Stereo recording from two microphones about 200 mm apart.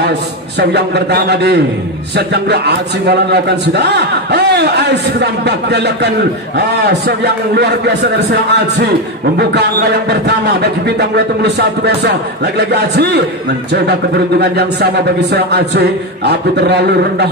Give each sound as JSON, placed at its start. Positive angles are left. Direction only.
{"t": 0.6, "sound": "a man's voice", "side_deg": -55}